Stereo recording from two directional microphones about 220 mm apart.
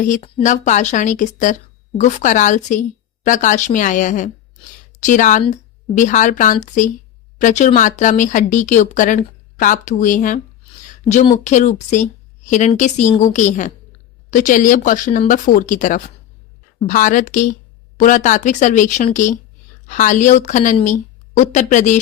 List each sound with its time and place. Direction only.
0.1 s speech: 30° left (ahead or behind)
11.4 s speech: 35° left (ahead or behind)